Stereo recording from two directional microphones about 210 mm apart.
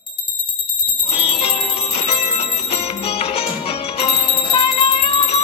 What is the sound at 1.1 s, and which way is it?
Bell, 25° left (ahead or behind).